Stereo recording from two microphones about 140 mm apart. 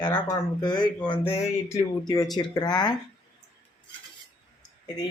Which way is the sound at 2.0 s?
30° left (ahead or behind).